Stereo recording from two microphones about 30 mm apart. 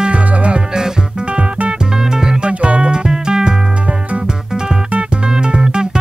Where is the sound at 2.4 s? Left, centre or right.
Right.